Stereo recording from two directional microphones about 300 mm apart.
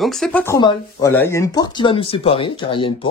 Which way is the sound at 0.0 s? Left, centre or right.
Centre.